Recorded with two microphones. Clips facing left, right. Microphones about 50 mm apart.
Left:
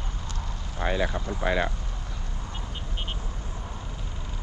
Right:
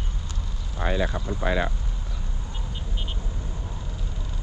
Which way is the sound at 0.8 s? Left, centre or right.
Left.